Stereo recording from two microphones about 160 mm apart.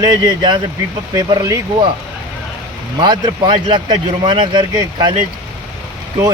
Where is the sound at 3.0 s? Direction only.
30° right (ahead or behind).